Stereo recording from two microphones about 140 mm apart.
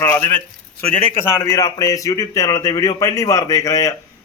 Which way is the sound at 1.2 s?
25° left (ahead or behind).